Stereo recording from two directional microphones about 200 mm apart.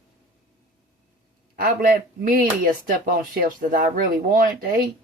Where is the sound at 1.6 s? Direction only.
45° right (ahead or behind).